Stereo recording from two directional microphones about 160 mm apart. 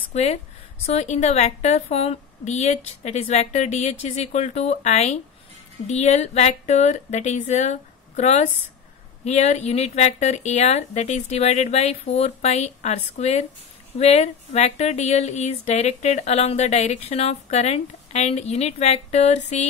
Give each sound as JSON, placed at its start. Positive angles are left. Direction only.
{"t": 0.1, "sound": "a woman's voice", "side_deg": 45}